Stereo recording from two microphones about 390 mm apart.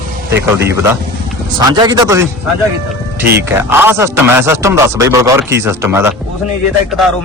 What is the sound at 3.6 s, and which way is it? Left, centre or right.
A man's voice, centre.